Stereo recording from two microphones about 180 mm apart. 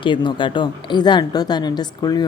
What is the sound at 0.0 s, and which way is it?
A woman's voice, 25° left (ahead or behind).